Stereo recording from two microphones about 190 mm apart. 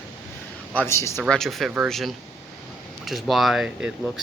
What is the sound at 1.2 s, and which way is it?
Speech, centre (ahead or behind).